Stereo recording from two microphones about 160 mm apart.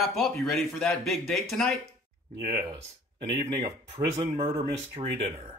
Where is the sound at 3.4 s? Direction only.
20° right (ahead or behind).